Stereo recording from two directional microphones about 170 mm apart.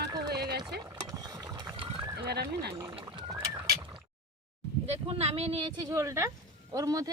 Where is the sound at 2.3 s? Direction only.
75° right (ahead or behind).